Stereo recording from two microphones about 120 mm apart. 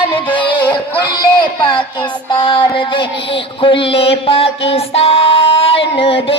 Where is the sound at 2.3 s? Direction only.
40° left (ahead or behind).